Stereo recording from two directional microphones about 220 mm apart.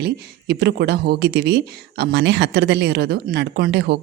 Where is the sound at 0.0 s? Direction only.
50° right (ahead or behind).